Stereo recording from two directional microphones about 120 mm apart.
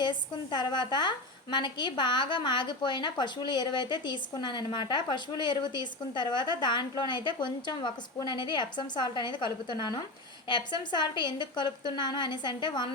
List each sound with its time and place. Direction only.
0.0 s a woman's voice: 40° left (ahead or behind)